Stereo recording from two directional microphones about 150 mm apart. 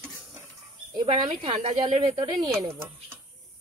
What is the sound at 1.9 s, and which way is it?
Speech, 50° right (ahead or behind).